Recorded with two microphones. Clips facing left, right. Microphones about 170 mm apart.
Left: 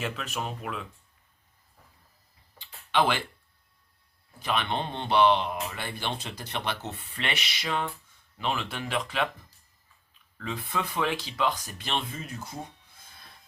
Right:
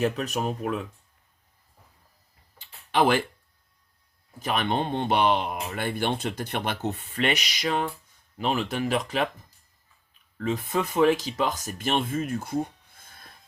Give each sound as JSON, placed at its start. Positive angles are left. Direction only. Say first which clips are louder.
{"t": 0.0, "sound": "speech", "louder": "right 7 dB", "side_deg": -40}
{"t": 2.6, "sound": "a sound", "louder": "right 3 dB", "side_deg": -45}
{"t": 4.4, "sound": "speech", "louder": "right 3 dB", "side_deg": -45}
{"t": 10.3, "sound": "speech", "louder": "right 6 dB", "side_deg": -40}